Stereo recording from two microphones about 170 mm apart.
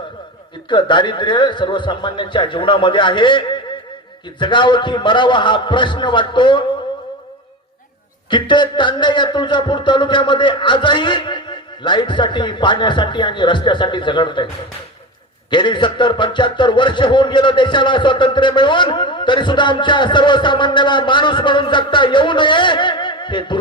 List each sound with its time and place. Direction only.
0.7 s a man's voice: 25° left (ahead or behind)
8.3 s a man's voice: 25° left (ahead or behind)
15.4 s a man's voice: 25° left (ahead or behind)